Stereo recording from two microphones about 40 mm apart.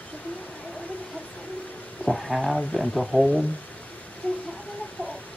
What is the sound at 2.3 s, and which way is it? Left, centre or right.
Speech, centre.